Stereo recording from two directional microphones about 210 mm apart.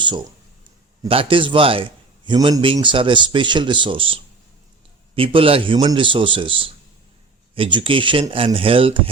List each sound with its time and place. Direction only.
1.0 s a man's voice: 25° right (ahead or behind)